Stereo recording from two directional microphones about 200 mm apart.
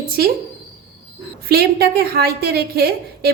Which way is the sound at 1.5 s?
50° right (ahead or behind).